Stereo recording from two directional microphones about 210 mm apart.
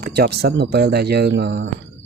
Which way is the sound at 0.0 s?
50° right (ahead or behind).